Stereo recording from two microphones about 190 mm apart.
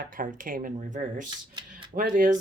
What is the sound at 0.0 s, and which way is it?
Speech, 45° right (ahead or behind).